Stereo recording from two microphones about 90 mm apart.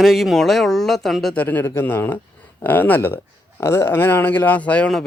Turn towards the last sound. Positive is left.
turn(degrees=15)  # may be behind; listen again after turning